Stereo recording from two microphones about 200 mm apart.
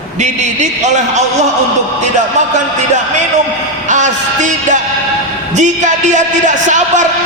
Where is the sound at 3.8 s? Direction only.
35° right (ahead or behind).